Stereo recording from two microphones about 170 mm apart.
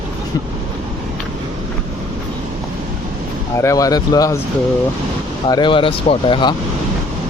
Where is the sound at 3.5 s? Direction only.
20° left (ahead or behind).